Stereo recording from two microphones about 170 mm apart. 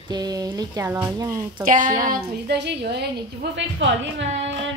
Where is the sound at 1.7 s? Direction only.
50° right (ahead or behind).